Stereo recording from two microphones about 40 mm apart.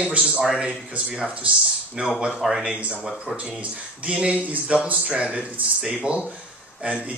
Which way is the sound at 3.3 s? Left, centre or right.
Centre.